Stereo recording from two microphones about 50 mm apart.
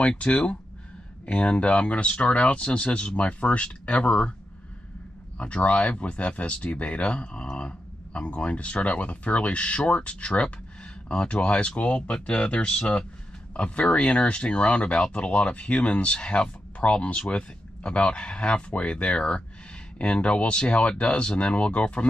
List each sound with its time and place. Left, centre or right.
0.1 s speech: left
5.4 s speech: left